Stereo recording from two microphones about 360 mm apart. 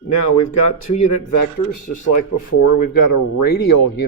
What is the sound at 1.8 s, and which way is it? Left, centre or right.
Speech, left.